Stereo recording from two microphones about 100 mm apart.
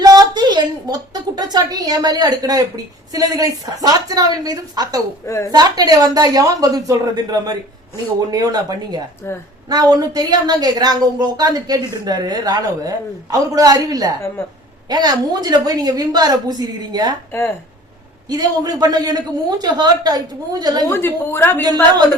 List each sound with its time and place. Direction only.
0.0 s a woman's voice: 40° right (ahead or behind)
5.2 s a woman's voice: 30° left (ahead or behind)
5.5 s a woman's voice: 40° right (ahead or behind)
18.3 s a woman's voice: 40° right (ahead or behind)
20.9 s a woman's voice: 25° left (ahead or behind)